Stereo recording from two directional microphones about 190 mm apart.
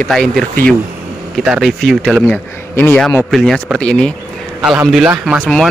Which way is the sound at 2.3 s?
10° left (ahead or behind).